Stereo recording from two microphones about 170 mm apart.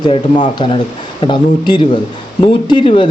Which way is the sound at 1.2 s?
25° left (ahead or behind).